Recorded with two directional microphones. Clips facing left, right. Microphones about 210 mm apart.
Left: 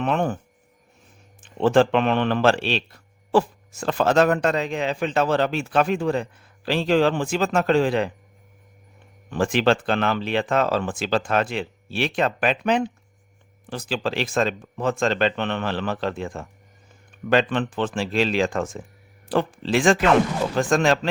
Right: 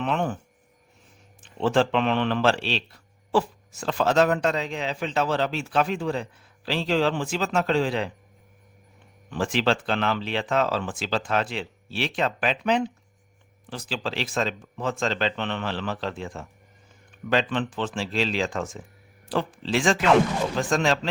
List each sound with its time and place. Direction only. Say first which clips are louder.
0.0 s speech: left 3 dB; 50° left (ahead or behind)
1.4 s speech: left 5 dB; 50° left (ahead or behind)
9.3 s speech: left 4 dB; 50° left (ahead or behind)